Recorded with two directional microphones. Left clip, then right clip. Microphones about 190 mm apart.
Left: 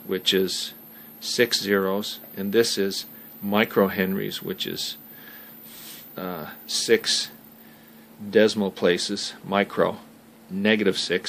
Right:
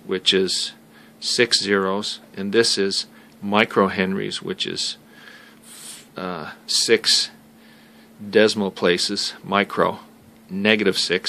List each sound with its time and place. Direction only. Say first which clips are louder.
0.1 s speech: right 4 dB; 20° right (ahead or behind)